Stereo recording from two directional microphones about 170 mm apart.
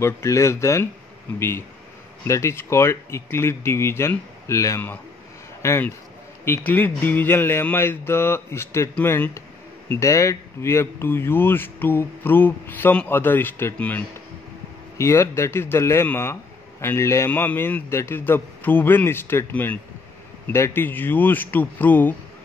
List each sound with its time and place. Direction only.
0.0 s speech: 15° left (ahead or behind)
2.2 s a man's voice: 15° left (ahead or behind)